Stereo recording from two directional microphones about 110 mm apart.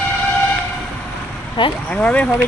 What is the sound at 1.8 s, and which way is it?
Speech, 10° left (ahead or behind).